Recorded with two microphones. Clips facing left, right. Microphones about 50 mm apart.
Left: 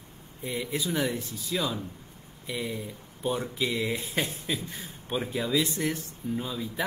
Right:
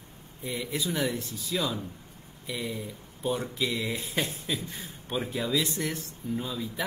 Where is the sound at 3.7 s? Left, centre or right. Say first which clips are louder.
Left 1 dB; centre.